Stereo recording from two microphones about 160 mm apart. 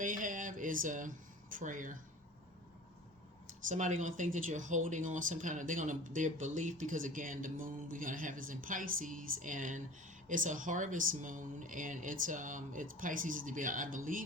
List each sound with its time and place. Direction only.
0.0 s speech: 55° right (ahead or behind)
3.4 s speech: 50° right (ahead or behind)